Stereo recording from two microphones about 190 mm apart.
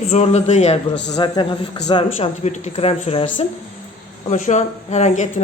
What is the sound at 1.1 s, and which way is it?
Speech, 25° left (ahead or behind).